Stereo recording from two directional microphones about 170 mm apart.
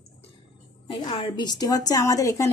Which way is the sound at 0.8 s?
30° left (ahead or behind).